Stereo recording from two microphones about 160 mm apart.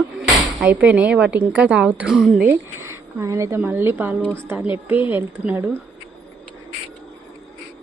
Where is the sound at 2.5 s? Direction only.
15° right (ahead or behind).